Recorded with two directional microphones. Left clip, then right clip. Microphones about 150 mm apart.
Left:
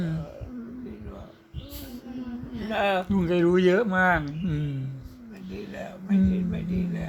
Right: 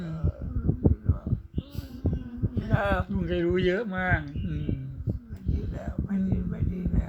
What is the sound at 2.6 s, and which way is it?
Speech, 10° left (ahead or behind).